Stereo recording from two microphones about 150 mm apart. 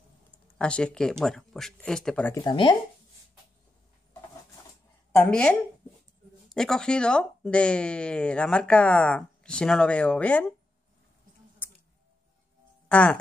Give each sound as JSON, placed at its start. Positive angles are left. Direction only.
{"t": 0.6, "sound": "speech", "side_deg": 5}
{"t": 2.3, "sound": "speech", "side_deg": 30}
{"t": 5.3, "sound": "speech", "side_deg": 5}
{"t": 12.8, "sound": "speech", "side_deg": 10}